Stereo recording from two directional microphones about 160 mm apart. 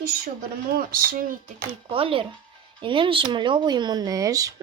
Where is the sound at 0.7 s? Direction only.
65° right (ahead or behind).